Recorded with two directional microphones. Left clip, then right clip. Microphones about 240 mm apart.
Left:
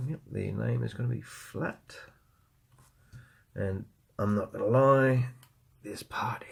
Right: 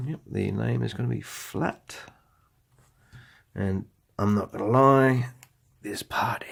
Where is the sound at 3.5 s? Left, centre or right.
Right.